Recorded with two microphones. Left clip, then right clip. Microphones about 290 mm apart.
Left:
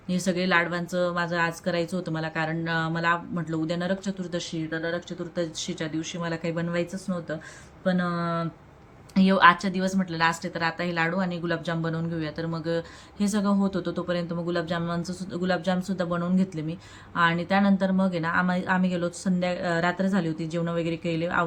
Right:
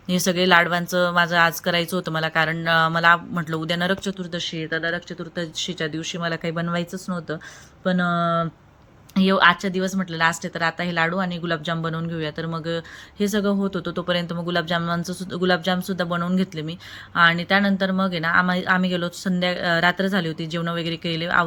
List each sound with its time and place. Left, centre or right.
0.1 s a woman's voice: centre